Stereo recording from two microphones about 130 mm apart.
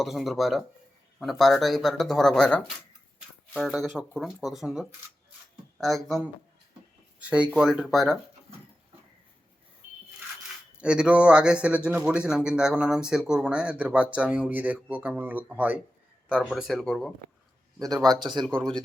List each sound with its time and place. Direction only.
0.0 s speech: centre (ahead or behind)
3.7 s speech: centre (ahead or behind)
7.2 s speech: 10° right (ahead or behind)
10.8 s a man's voice: 5° right (ahead or behind)
16.3 s a man's voice: 5° left (ahead or behind)
17.7 s speech: 30° right (ahead or behind)
18.4 s speech: 5° left (ahead or behind)